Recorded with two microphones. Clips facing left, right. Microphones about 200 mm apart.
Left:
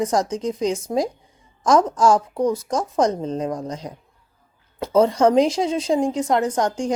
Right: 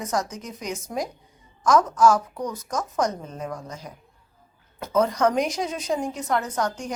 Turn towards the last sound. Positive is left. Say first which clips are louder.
# left 6 dB
turn(degrees=30)  # may be behind; listen again after turning